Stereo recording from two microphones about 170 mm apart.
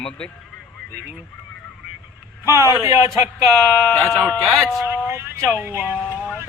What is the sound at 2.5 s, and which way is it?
Speech, 15° right (ahead or behind).